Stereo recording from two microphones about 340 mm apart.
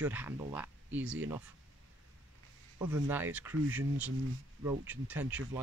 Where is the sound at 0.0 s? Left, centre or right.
Centre.